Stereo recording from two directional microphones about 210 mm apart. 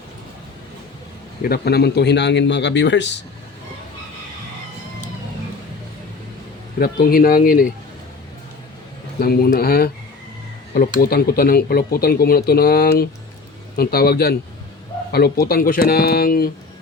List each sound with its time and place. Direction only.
1.5 s speech: 50° left (ahead or behind)
6.7 s speech: 45° left (ahead or behind)
9.2 s speech: 45° left (ahead or behind)
15.4 s speech: 45° left (ahead or behind)